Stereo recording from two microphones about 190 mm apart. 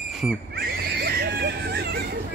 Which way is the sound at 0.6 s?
55° right (ahead or behind).